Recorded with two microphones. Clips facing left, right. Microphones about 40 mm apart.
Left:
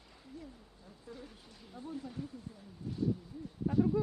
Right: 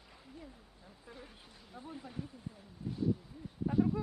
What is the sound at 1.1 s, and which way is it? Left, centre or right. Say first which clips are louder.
Speech: left 3 dB; centre.